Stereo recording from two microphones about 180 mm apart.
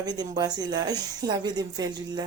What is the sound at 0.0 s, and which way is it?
A woman's voice, 20° right (ahead or behind).